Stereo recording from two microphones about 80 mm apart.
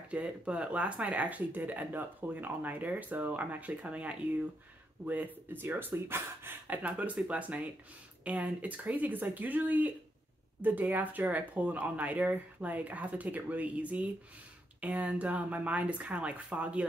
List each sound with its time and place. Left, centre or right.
0.1 s speech: centre